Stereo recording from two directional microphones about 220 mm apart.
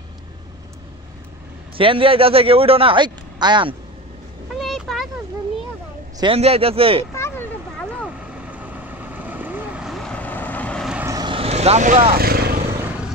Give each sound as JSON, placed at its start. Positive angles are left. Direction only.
{"t": 1.8, "sound": "a man's voice", "side_deg": -25}
{"t": 4.6, "sound": "vehicle", "side_deg": 0}
{"t": 6.1, "sound": "a man's voice", "side_deg": -25}
{"t": 7.2, "sound": "a sound", "side_deg": 10}
{"t": 8.2, "sound": "vehicle", "side_deg": -5}
{"t": 11.1, "sound": "vehicle", "side_deg": -20}